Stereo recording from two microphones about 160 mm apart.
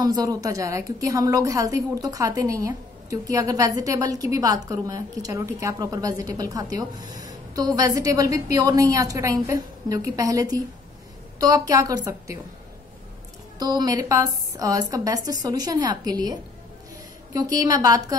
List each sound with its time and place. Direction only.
0.0 s a woman's voice: 20° right (ahead or behind)
13.6 s a woman's voice: 25° right (ahead or behind)